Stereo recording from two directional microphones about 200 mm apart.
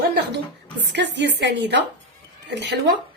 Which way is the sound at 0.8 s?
60° right (ahead or behind).